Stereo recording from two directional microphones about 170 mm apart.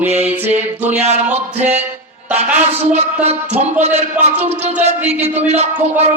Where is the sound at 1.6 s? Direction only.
40° right (ahead or behind).